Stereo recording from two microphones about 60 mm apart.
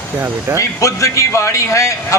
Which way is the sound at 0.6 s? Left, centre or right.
Left.